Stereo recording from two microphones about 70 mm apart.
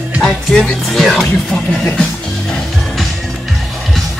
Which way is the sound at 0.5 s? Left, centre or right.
Centre.